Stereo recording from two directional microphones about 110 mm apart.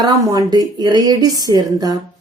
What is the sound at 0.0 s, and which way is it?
A woman's voice, 35° right (ahead or behind).